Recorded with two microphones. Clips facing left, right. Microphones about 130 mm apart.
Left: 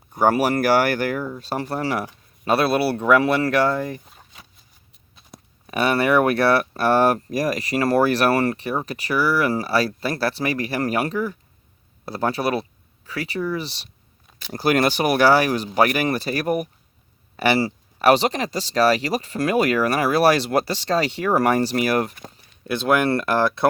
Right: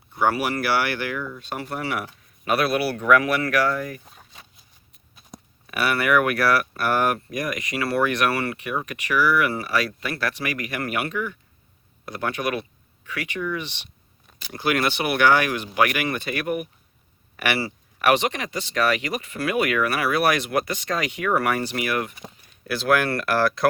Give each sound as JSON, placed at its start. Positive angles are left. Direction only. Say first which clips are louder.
{"t": 0.1, "sound": "speech", "louder": "left 4 dB", "side_deg": 40}
{"t": 5.6, "sound": "speech", "louder": "left 3 dB", "side_deg": 30}
{"t": 22.6, "sound": "speech", "louder": "left 2 dB", "side_deg": 25}